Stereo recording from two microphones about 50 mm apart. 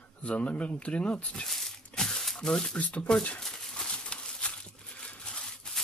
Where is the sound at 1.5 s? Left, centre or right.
Centre.